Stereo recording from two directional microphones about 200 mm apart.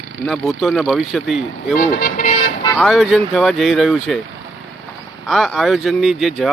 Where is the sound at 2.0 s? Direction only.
40° left (ahead or behind).